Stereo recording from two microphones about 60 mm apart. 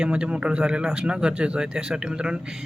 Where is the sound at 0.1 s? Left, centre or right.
Centre.